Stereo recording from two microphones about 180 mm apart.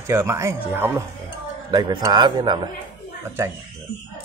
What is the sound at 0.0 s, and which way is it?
A man's voice, 15° right (ahead or behind).